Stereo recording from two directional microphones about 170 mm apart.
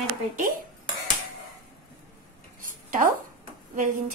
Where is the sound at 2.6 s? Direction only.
55° right (ahead or behind).